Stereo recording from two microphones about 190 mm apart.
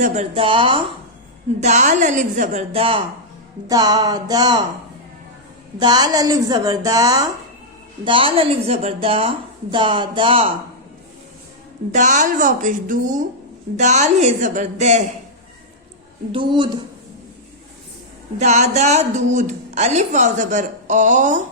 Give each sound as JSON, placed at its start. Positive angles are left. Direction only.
{"t": 0.0, "sound": "a woman's voice", "side_deg": -35}
{"t": 1.6, "sound": "a woman's voice", "side_deg": -40}
{"t": 5.8, "sound": "a woman's voice", "side_deg": -20}
{"t": 11.9, "sound": "speech", "side_deg": -40}
{"t": 16.3, "sound": "a woman's voice", "side_deg": -25}
{"t": 18.3, "sound": "speech", "side_deg": -35}